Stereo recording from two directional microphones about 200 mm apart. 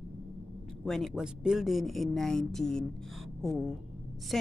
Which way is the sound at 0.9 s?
Centre (ahead or behind).